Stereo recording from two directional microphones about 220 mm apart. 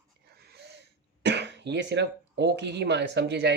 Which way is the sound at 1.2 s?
50° right (ahead or behind).